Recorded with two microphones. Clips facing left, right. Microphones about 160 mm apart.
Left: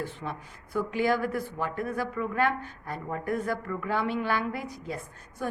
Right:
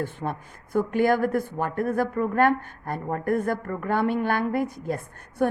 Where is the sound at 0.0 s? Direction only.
50° right (ahead or behind).